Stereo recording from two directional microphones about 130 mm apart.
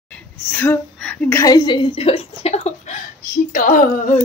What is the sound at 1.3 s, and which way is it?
A woman's voice, 30° left (ahead or behind).